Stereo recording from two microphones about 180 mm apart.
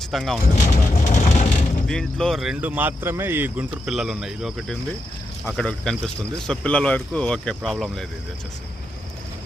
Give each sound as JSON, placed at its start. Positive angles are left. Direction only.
{"t": 0.1, "sound": "speech", "side_deg": 0}
{"t": 0.5, "sound": "vehicle", "side_deg": 45}
{"t": 1.9, "sound": "speech", "side_deg": 5}